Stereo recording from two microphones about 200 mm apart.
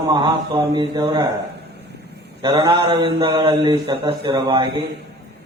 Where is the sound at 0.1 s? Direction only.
25° right (ahead or behind).